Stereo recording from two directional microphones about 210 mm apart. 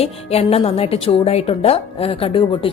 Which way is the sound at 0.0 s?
30° left (ahead or behind).